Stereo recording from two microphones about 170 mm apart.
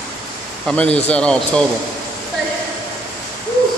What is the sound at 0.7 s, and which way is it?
Speech, 10° left (ahead or behind).